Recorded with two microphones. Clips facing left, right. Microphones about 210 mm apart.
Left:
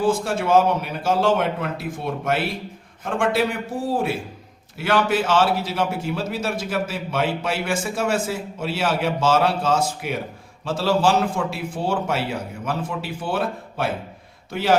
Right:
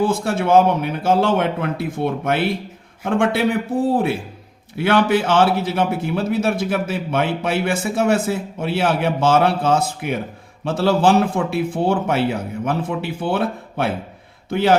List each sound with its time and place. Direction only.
0.0 s a man's voice: 55° right (ahead or behind)